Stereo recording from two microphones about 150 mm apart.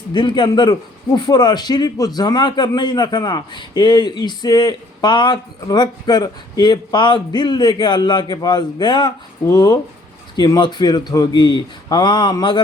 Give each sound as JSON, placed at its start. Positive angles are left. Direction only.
{"t": 0.1, "sound": "a man's voice", "side_deg": 30}